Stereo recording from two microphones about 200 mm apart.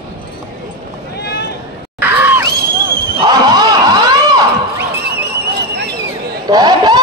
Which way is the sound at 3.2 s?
20° right (ahead or behind).